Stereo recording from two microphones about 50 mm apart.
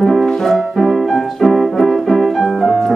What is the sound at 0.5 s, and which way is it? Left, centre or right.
Music, centre.